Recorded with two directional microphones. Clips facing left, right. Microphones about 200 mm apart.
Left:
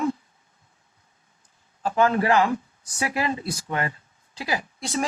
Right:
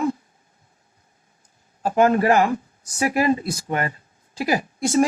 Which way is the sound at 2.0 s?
45° right (ahead or behind).